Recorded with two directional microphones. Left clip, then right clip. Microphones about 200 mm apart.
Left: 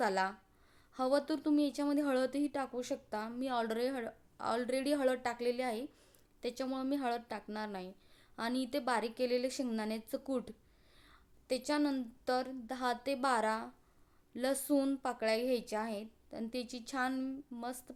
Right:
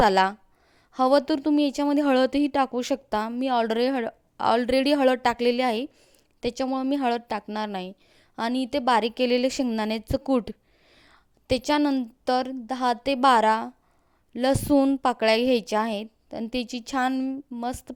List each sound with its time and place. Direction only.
0.0 s a woman's voice: 40° right (ahead or behind)